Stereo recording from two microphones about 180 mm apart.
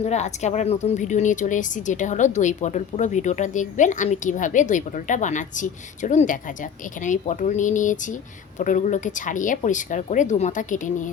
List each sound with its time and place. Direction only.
0.0 s a woman's voice: 40° left (ahead or behind)